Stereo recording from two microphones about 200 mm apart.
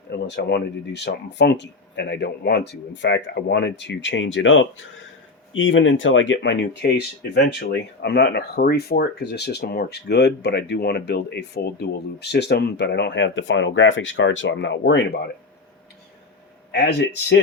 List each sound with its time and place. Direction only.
0.1 s speech: 60° left (ahead or behind)
16.7 s speech: 60° left (ahead or behind)